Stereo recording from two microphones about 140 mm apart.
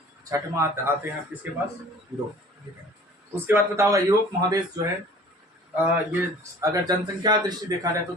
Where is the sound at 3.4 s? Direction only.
20° right (ahead or behind).